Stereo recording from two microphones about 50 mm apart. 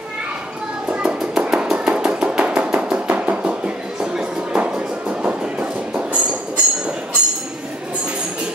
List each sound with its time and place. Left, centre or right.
0.8 s music: right
1.2 s a sound: centre
1.9 s chopping: centre
3.1 s music: centre